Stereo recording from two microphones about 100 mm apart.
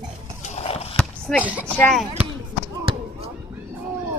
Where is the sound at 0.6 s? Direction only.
90° left.